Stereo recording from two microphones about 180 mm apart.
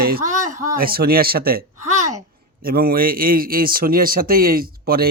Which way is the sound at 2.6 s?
55° right (ahead or behind).